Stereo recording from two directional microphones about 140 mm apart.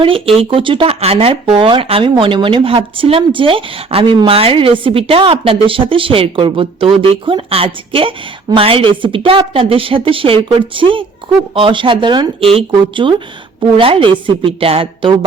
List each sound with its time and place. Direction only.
0.0 s speech: 40° right (ahead or behind)